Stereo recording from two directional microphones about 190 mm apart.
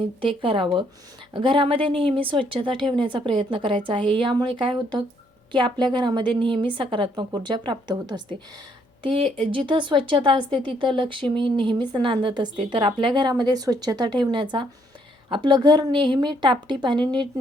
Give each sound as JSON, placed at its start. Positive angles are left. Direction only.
{"t": 0.2, "sound": "speech", "side_deg": -25}